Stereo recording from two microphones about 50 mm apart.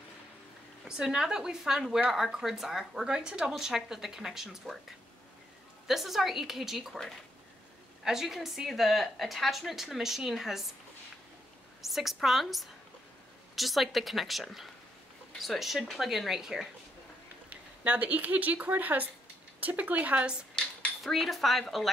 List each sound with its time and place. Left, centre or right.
0.8 s speech: centre
5.9 s speech: centre
8.0 s speech: centre
11.8 s speech: centre
17.5 s speech: right
21.0 s speech: centre